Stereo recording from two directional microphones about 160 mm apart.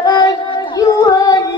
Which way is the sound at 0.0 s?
25° left (ahead or behind).